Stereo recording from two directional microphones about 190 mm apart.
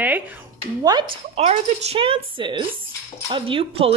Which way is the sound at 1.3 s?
35° right (ahead or behind).